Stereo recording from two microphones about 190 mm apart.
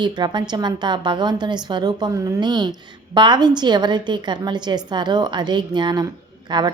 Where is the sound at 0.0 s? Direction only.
25° right (ahead or behind).